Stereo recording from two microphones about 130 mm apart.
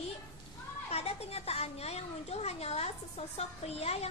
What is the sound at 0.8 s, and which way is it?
Speech, 55° left (ahead or behind).